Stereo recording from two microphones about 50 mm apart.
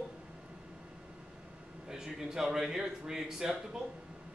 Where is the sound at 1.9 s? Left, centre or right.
Centre.